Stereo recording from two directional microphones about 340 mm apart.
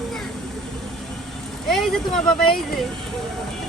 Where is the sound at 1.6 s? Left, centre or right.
Centre.